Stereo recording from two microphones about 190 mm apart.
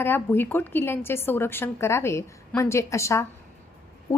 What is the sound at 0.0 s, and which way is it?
A woman's voice, 10° left (ahead or behind).